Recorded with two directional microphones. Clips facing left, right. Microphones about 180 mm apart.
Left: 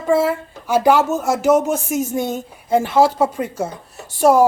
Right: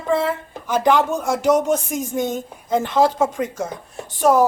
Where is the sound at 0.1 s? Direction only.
10° left (ahead or behind).